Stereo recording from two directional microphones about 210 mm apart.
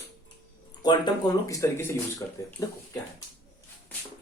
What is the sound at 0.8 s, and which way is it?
Speech, 20° left (ahead or behind).